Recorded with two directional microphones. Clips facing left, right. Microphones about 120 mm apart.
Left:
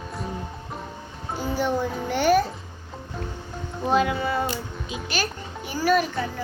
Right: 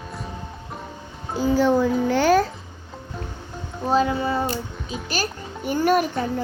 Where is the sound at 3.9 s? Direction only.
35° right (ahead or behind).